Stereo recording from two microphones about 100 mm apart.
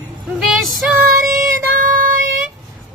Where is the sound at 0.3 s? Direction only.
Centre (ahead or behind).